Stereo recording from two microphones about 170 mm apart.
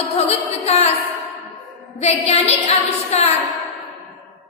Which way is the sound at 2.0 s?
40° left (ahead or behind).